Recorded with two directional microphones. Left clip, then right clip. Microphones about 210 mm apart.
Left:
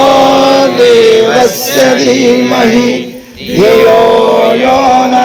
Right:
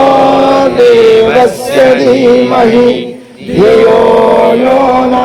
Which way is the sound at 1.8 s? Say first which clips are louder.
Right 2 dB; 20° right (ahead or behind).